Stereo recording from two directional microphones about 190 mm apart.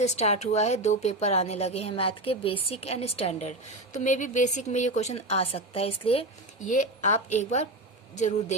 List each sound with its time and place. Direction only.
0.0 s a woman's voice: 35° left (ahead or behind)
6.7 s a woman's voice: 40° left (ahead or behind)